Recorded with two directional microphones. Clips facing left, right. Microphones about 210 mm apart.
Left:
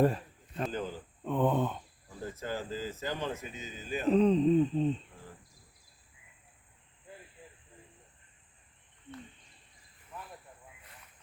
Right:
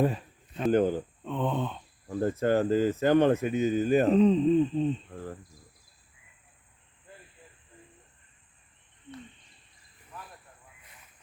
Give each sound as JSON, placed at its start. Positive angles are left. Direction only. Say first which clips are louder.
{"t": 0.0, "sound": "a sound", "louder": "even", "side_deg": 0}
{"t": 0.7, "sound": "speech", "louder": "right 13 dB", "side_deg": -60}
{"t": 1.2, "sound": "speech", "louder": "left 4 dB", "side_deg": 10}
{"t": 2.0, "sound": "speech", "louder": "right 13 dB", "side_deg": -60}
{"t": 4.1, "sound": "hoot", "louder": "left 2 dB", "side_deg": 0}
{"t": 5.1, "sound": "speech", "louder": "right 12 dB", "side_deg": -55}